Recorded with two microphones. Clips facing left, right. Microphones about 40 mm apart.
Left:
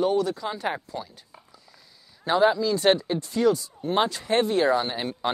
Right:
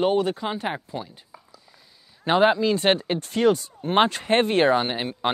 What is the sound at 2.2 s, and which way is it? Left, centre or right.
Speech, right.